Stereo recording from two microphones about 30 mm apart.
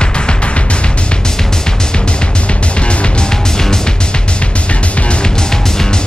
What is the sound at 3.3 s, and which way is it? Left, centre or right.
Music, centre.